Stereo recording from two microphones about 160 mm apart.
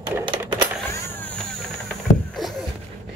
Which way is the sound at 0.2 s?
30° right (ahead or behind).